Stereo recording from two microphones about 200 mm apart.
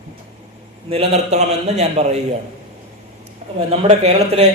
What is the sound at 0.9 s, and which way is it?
A man's voice, 30° right (ahead or behind).